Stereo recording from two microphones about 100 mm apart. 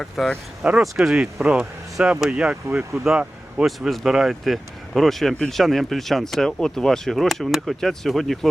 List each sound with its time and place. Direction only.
0.0 s speech: centre (ahead or behind)
0.6 s speech: 10° right (ahead or behind)